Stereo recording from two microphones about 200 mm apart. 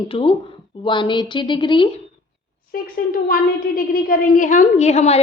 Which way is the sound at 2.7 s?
45° left (ahead or behind).